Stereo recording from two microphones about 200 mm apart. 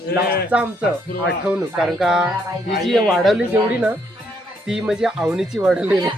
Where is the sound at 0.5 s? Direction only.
10° right (ahead or behind).